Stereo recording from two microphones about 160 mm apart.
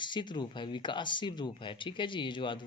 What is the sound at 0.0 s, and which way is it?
Speech, 30° left (ahead or behind).